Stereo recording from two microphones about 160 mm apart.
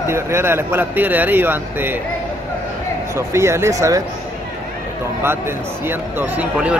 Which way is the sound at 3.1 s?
15° right (ahead or behind).